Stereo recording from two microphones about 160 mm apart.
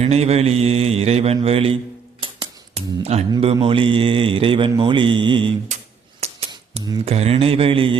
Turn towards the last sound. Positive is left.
turn(degrees=-35)  # may be behind; listen again after turning